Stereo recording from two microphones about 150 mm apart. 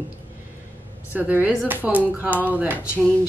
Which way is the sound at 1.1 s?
10° right (ahead or behind).